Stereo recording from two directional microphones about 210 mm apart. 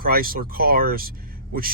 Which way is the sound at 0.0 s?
45° right (ahead or behind).